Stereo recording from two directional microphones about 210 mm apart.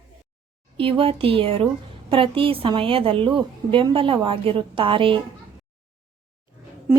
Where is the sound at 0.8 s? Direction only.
25° right (ahead or behind).